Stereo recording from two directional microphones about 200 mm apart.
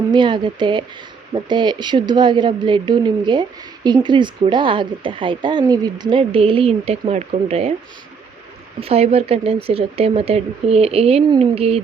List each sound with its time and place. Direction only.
0.1 s speech: 25° right (ahead or behind)
8.8 s speech: 30° right (ahead or behind)